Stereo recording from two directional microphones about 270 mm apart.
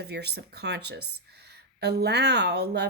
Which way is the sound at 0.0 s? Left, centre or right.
Right.